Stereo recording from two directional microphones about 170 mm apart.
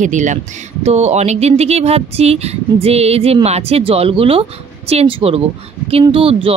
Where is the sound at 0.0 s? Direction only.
45° right (ahead or behind).